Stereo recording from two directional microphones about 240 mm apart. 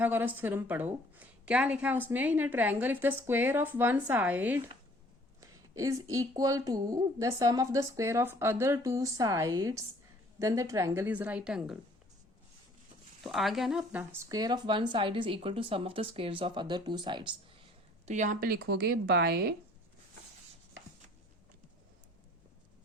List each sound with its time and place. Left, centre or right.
0.0 s a woman's voice: centre
13.2 s speech: centre
18.0 s speech: right